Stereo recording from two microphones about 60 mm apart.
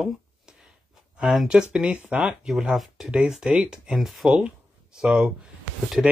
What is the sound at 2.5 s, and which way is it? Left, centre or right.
Speech, centre.